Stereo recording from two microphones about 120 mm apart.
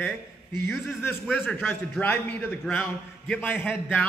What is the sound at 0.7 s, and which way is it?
A man's voice, 20° left (ahead or behind).